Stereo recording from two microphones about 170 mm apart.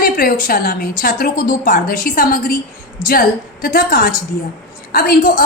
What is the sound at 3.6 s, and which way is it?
A woman's voice, 60° left (ahead or behind).